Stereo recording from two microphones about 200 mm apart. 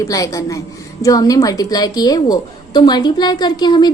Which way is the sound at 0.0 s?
15° left (ahead or behind).